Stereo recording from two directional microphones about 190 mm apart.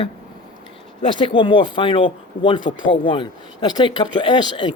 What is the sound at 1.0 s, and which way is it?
Speech, 25° left (ahead or behind).